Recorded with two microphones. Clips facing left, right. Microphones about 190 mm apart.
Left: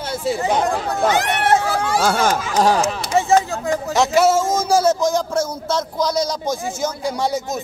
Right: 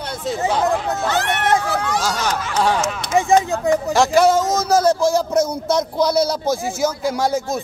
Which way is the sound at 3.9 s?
Centre (ahead or behind).